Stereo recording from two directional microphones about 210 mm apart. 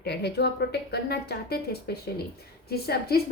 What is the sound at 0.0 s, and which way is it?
A woman's voice, 50° left (ahead or behind).